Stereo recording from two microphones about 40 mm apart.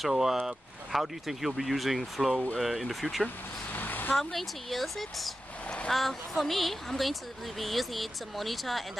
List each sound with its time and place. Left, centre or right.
0.1 s a woman's voice: centre
3.7 s vehicle: left
4.2 s a woman's voice: centre